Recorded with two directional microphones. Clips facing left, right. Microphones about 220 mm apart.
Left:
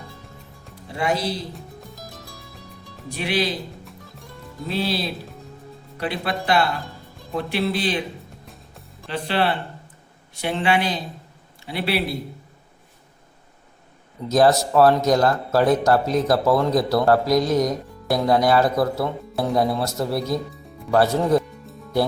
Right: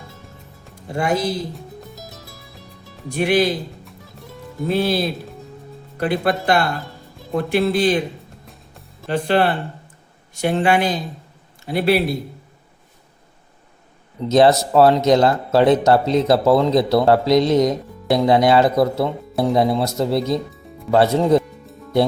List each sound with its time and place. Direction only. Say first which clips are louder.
0.9 s speech: right 3 dB; 50° right (ahead or behind)
1.5 s music: right 3 dB; 5° right (ahead or behind)
3.1 s speech: right 7 dB; 50° right (ahead or behind)
4.7 s speech: right 5 dB; 50° right (ahead or behind)
9.0 s a man's voice: right 5 dB; 45° right (ahead or behind)
14.3 s speech: right 3 dB; 25° right (ahead or behind)